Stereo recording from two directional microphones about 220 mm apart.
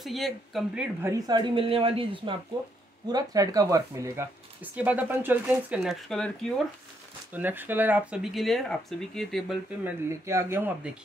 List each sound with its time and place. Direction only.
0.0 s speech: centre (ahead or behind)
1.1 s speech: 20° right (ahead or behind); by 6.3 s centre (ahead or behind)
7.3 s speech: 10° right (ahead or behind)
10.0 s speech: 10° right (ahead or behind)